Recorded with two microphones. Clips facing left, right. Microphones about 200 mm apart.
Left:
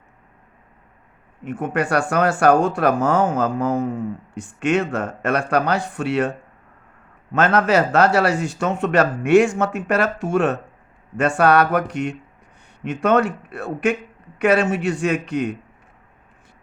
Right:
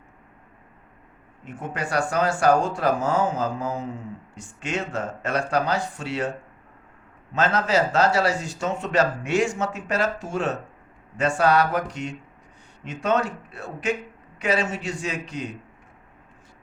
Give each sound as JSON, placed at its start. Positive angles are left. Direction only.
{"t": 1.5, "sound": "speech", "side_deg": 60}
{"t": 7.3, "sound": "speech", "side_deg": 60}